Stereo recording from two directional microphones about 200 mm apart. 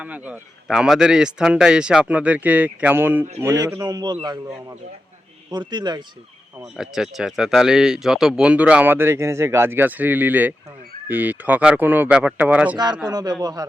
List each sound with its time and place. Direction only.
0.0 s a man's voice: 5° right (ahead or behind)
6.7 s speech: centre (ahead or behind)
12.7 s a man's voice: 20° right (ahead or behind)